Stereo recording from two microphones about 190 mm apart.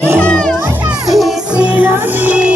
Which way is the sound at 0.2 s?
5° left (ahead or behind).